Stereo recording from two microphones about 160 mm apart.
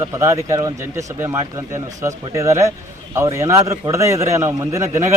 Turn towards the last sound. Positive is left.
turn(degrees=-20)  # may be behind; listen again after turning